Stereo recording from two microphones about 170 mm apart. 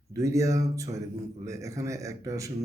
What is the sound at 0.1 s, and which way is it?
A man's voice, 20° right (ahead or behind).